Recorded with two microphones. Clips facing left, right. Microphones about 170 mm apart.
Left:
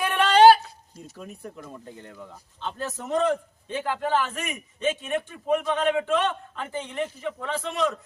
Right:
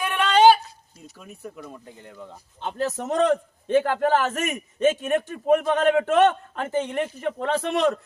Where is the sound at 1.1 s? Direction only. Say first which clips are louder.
Even; centre (ahead or behind).